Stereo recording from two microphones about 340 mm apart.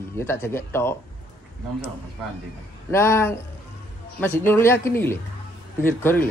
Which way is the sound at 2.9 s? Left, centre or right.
Centre.